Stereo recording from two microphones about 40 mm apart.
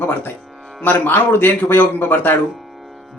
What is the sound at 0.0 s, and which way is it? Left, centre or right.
Speech, left.